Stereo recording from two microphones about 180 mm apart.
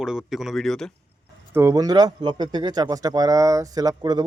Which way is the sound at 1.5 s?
15° right (ahead or behind).